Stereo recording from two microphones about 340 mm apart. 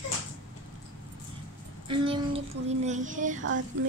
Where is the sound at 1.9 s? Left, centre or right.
Centre.